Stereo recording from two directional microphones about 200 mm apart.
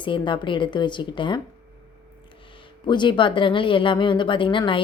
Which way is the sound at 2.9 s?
25° left (ahead or behind).